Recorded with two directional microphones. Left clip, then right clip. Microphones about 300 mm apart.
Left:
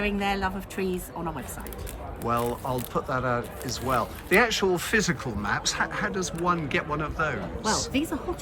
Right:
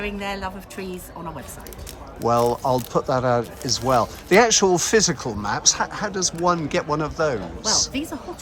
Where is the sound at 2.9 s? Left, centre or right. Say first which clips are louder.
Right 4 dB; centre.